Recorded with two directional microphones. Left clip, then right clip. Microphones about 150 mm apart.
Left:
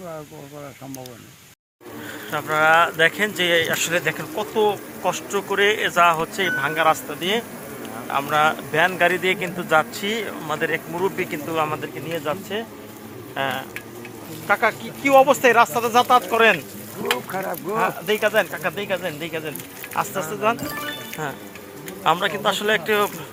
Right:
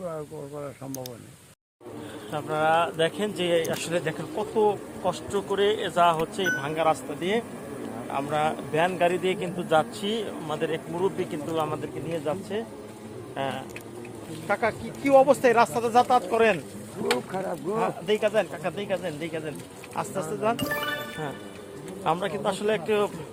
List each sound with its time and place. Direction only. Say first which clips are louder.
2.3 s speech: left 7 dB; 10° left (ahead or behind)
22.0 s speech: left 7 dB; 15° left (ahead or behind)